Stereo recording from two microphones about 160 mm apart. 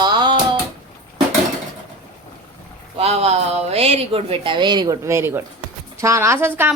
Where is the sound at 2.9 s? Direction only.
40° right (ahead or behind).